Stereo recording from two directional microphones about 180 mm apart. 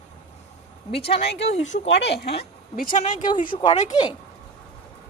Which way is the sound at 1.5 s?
40° left (ahead or behind).